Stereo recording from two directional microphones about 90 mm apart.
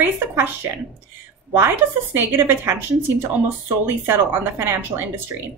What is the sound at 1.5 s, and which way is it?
A woman's voice, 25° right (ahead or behind).